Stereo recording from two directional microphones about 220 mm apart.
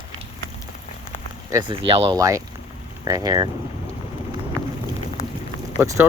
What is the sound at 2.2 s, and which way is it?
Speech, 15° right (ahead or behind).